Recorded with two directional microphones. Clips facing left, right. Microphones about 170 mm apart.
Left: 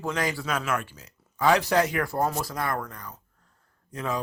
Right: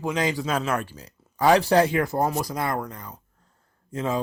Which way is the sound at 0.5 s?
35° right (ahead or behind).